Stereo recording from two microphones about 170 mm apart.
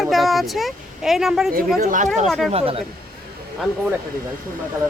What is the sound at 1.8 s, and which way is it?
Speech, 50° right (ahead or behind).